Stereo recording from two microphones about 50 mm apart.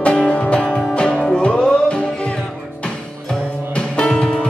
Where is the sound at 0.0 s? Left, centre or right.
Left.